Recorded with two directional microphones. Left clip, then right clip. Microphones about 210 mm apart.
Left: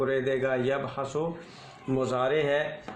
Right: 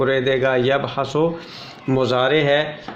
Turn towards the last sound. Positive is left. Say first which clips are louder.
# right 8 dB
turn(degrees=15)  # may be behind; listen again after turning